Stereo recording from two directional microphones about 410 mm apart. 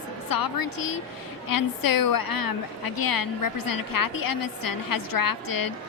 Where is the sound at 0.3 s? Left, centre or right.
Left.